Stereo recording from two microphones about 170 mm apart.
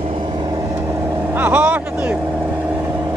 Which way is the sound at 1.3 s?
10° right (ahead or behind).